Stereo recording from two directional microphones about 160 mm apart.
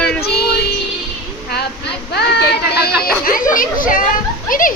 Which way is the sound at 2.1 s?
90° left.